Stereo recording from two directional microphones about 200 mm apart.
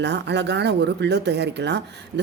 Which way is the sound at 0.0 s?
60° right (ahead or behind).